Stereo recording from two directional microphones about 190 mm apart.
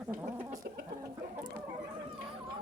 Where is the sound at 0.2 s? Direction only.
15° right (ahead or behind).